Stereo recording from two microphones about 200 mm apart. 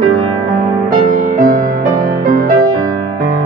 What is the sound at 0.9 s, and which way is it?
Music, 45° right (ahead or behind).